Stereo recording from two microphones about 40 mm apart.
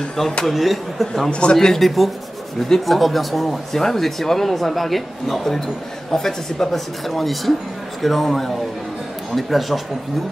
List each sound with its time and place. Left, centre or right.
0.5 s speech: centre
1.3 s speech: left
1.6 s speech: centre